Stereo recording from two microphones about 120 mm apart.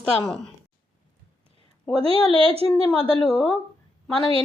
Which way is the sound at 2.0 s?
55° right (ahead or behind).